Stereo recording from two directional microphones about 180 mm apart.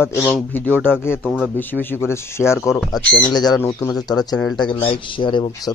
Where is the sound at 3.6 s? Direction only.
15° left (ahead or behind).